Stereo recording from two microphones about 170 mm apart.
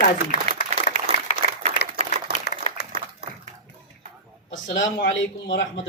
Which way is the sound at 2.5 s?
70° left (ahead or behind).